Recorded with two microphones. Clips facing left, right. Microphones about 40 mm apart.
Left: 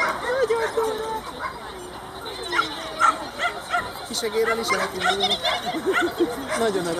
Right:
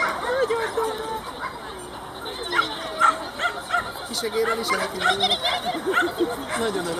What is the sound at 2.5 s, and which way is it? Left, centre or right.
Bow-wow, right.